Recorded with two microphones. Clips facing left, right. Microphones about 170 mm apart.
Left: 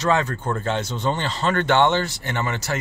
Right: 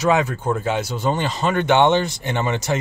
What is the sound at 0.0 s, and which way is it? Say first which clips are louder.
Speech: right 3 dB; 10° right (ahead or behind).